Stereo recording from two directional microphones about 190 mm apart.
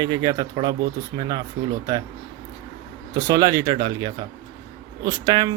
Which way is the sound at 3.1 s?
20° right (ahead or behind).